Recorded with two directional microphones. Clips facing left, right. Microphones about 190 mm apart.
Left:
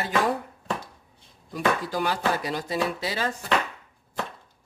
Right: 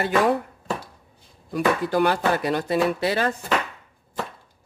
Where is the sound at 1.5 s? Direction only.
60° right (ahead or behind).